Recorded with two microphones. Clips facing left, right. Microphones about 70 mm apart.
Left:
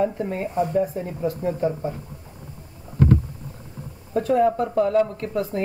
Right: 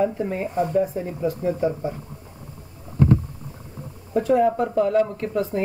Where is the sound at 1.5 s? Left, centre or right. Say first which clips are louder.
Right 1 dB; centre.